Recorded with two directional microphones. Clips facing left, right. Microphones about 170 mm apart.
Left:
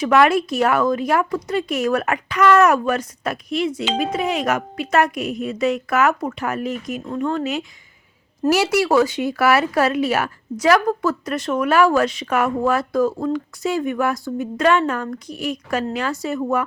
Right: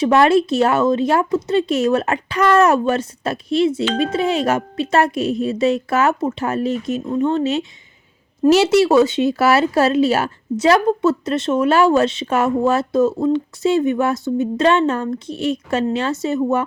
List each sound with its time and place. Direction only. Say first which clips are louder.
0.0 s speech: right 2 dB; 30° right (ahead or behind)